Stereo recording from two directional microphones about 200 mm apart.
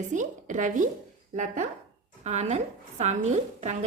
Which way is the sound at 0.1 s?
40° right (ahead or behind).